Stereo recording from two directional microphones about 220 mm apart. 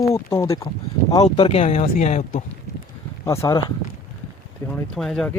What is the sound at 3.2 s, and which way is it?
Speech, 15° left (ahead or behind).